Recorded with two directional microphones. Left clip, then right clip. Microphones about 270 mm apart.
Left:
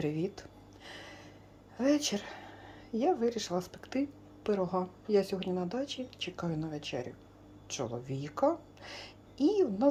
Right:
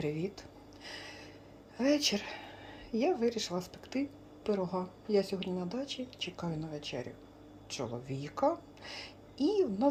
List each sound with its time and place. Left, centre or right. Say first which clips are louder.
0.0 s speech: left 2 dB; centre
0.9 s gasp: right 2 dB; centre
1.8 s a woman's voice: even; centre